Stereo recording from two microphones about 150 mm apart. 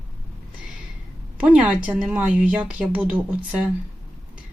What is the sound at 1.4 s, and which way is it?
Speech, 10° right (ahead or behind).